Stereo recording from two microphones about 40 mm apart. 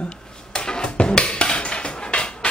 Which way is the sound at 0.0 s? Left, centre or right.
Left.